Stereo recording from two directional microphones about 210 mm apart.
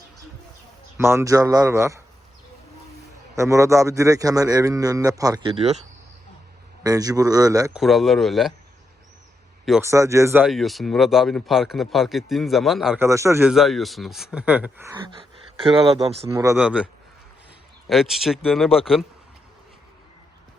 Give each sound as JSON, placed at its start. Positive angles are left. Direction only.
{"t": 0.9, "sound": "a man's voice", "side_deg": -10}
{"t": 3.3, "sound": "a man's voice", "side_deg": -15}
{"t": 6.8, "sound": "a man's voice", "side_deg": -15}
{"t": 7.7, "sound": "speech", "side_deg": 0}
{"t": 9.8, "sound": "speech", "side_deg": -15}
{"t": 13.1, "sound": "a man's voice", "side_deg": -15}
{"t": 13.4, "sound": "speech", "side_deg": 0}
{"t": 14.9, "sound": "speech", "side_deg": -25}
{"t": 16.2, "sound": "a man's voice", "side_deg": -15}